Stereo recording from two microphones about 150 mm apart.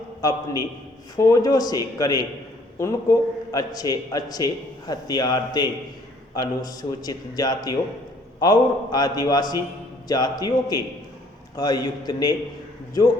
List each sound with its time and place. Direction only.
0.2 s a man's voice: 25° left (ahead or behind)